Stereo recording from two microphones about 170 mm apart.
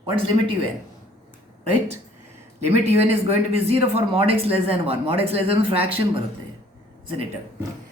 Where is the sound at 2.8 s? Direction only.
35° right (ahead or behind).